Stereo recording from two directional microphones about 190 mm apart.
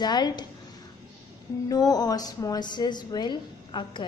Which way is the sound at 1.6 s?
20° left (ahead or behind).